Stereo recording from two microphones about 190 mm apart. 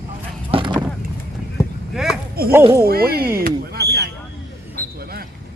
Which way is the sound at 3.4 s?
60° right (ahead or behind).